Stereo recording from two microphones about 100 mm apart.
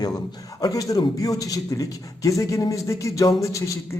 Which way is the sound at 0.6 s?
35° left (ahead or behind).